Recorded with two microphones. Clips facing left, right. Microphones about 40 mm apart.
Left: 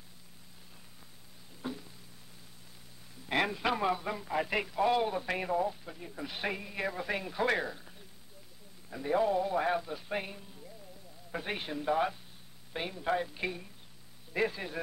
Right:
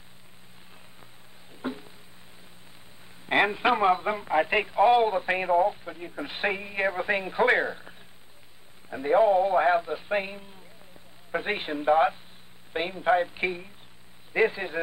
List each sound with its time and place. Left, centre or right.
1.6 s a sound: right
3.3 s a man's voice: right
8.9 s a man's voice: right